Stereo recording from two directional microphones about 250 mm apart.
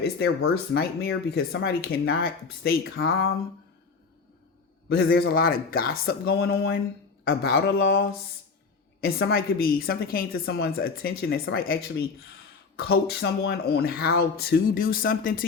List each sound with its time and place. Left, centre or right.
0.2 s a woman's voice: left
3.0 s a sound: left
4.9 s a woman's voice: left